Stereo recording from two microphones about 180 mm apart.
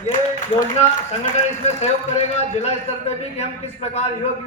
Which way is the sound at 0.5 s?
30° left (ahead or behind).